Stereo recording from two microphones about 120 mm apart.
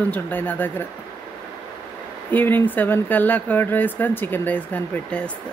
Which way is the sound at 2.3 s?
15° left (ahead or behind).